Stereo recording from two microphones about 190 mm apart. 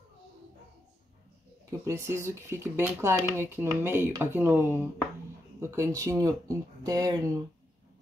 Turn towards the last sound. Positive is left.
turn(degrees=-20)  # may be behind; listen again after turning